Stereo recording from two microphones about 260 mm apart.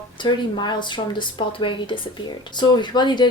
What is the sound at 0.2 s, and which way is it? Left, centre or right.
Speech, centre.